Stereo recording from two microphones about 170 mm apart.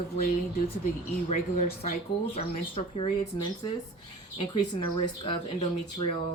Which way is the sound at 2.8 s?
40° left (ahead or behind).